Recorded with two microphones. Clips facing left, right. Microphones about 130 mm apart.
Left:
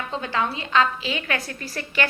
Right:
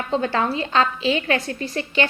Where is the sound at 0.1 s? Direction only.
40° right (ahead or behind).